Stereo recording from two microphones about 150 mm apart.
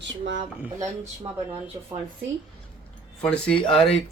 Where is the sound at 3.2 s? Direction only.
5° left (ahead or behind).